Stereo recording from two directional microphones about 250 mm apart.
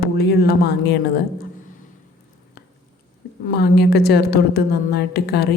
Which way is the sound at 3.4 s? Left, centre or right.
Left.